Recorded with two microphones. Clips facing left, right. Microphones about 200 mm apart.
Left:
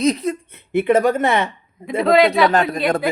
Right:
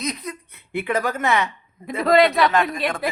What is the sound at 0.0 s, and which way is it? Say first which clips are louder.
Speech: left 11 dB; 30° left (ahead or behind).